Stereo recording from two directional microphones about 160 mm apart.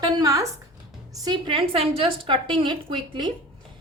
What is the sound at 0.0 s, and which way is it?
A woman's voice, 20° right (ahead or behind).